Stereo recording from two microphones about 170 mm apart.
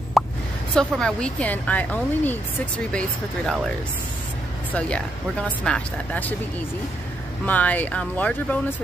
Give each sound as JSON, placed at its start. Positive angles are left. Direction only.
{"t": 0.2, "sound": "plop", "side_deg": 0}
{"t": 0.7, "sound": "speech", "side_deg": 5}
{"t": 4.7, "sound": "speech", "side_deg": 5}
{"t": 7.4, "sound": "speech", "side_deg": 10}